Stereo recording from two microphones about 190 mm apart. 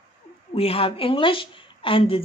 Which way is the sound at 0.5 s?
30° left (ahead or behind).